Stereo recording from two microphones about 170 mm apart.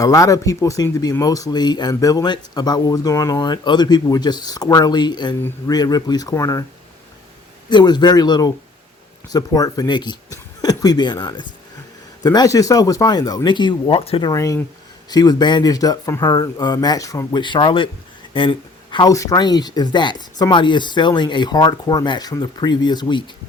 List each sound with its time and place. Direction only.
0.0 s speech: 20° left (ahead or behind)
7.7 s speech: 25° left (ahead or behind)